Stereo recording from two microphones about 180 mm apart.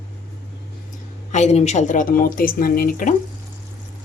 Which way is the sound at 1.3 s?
40° left (ahead or behind).